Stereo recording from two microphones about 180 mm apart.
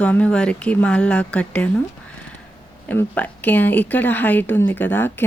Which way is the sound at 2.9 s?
10° left (ahead or behind).